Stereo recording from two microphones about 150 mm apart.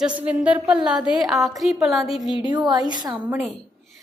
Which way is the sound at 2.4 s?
30° right (ahead or behind).